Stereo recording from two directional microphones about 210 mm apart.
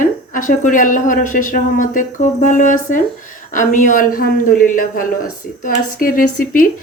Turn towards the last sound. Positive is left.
turn(degrees=40)  # may be behind; listen again after turning